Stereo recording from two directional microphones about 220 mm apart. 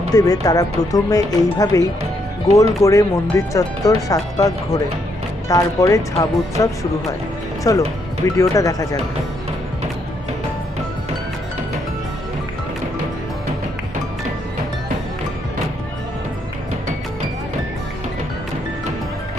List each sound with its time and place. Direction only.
0.1 s speech: 15° left (ahead or behind)